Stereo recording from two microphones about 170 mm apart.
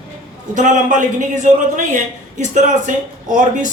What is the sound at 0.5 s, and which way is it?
A man's voice, 45° right (ahead or behind).